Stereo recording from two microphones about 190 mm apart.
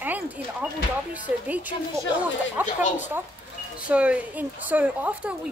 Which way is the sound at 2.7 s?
40° left (ahead or behind).